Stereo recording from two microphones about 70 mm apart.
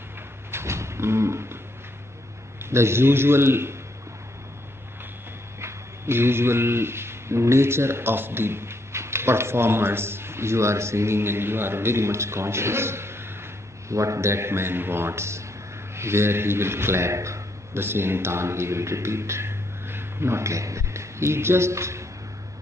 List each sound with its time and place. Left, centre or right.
0.5 s a sound: right
2.6 s a man's voice: right
5.6 s a man's voice: right